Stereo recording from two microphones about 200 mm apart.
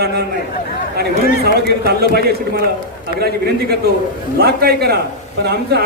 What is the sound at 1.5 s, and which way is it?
A man's voice, 55° right (ahead or behind).